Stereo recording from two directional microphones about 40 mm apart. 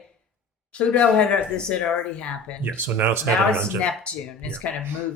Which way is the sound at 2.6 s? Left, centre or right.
Right.